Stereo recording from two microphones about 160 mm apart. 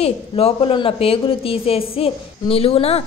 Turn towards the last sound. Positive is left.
turn(degrees=40)  # may be behind; listen again after turning